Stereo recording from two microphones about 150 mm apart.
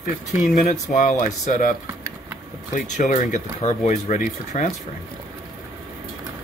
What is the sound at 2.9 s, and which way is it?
Speech, 55° left (ahead or behind).